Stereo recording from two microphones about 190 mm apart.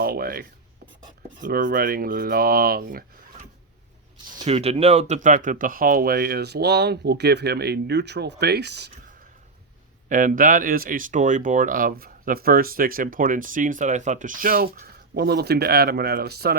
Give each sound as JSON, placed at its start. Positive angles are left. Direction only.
{"t": 0.0, "sound": "rub", "side_deg": -50}
{"t": 1.4, "sound": "speech", "side_deg": -45}
{"t": 4.4, "sound": "speech", "side_deg": -35}
{"t": 10.1, "sound": "speech", "side_deg": -45}